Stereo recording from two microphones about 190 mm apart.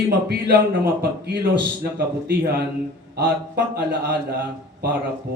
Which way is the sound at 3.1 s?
55° right (ahead or behind).